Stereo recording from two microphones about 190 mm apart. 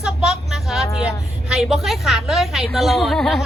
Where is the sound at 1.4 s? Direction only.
Centre (ahead or behind).